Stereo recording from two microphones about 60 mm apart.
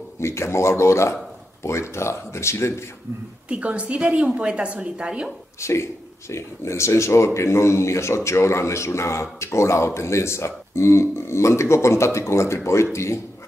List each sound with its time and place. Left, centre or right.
0.2 s speech: left
3.4 s a woman's voice: right
5.6 s speech: left